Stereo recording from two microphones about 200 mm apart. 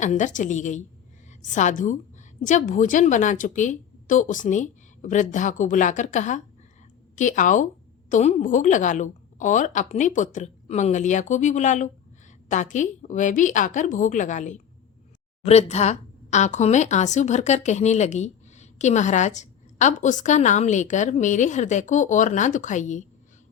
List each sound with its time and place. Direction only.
0.0 s a woman's voice: 40° left (ahead or behind)